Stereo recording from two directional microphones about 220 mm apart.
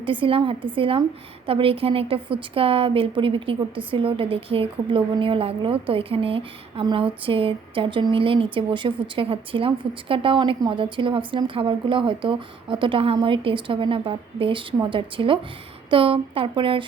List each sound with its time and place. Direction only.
0.0 s a woman's voice: 25° right (ahead or behind)